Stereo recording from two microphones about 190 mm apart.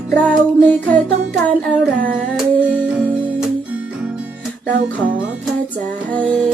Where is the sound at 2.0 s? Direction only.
45° right (ahead or behind).